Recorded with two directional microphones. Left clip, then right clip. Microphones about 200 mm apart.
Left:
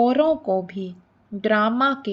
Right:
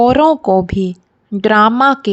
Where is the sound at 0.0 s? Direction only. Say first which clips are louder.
Right 9 dB; 60° right (ahead or behind).